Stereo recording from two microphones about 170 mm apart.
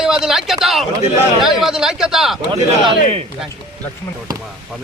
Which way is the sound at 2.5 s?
30° right (ahead or behind).